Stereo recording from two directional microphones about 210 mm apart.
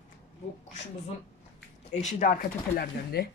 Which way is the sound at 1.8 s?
35° left (ahead or behind).